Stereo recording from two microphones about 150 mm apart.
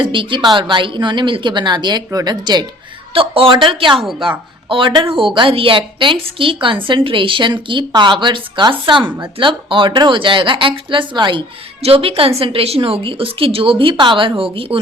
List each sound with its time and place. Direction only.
0.0 s speech: 35° right (ahead or behind)